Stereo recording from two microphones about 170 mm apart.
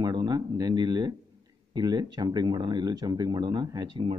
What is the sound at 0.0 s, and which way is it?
Speech, 20° right (ahead or behind).